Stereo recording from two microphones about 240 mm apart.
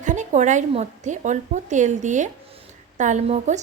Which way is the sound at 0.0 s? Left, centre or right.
Right.